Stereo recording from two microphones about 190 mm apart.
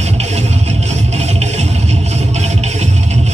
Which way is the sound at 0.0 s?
35° right (ahead or behind).